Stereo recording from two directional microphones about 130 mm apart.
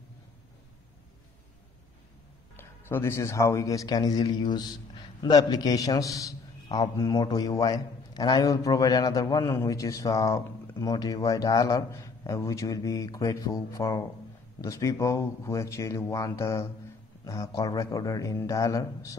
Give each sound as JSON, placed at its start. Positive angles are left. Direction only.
{"t": 2.5, "sound": "a man's voice", "side_deg": 20}